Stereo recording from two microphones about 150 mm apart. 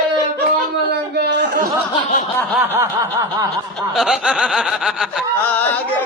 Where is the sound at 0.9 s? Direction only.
90° right.